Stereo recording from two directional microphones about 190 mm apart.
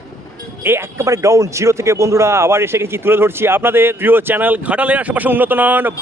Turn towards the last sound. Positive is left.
turn(degrees=-10)  # may be behind; listen again after turning